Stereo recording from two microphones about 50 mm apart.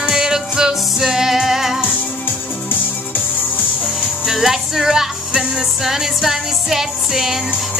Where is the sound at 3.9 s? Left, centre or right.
Centre.